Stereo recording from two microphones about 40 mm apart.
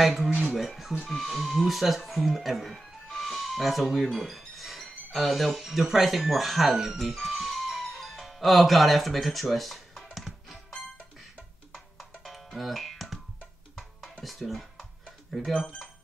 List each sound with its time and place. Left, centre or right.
0.0 s speech: centre
2.8 s music: centre
4.6 s a sound: centre
5.6 s speech: centre
7.0 s music: centre
12.4 s music: centre
14.2 s speech: centre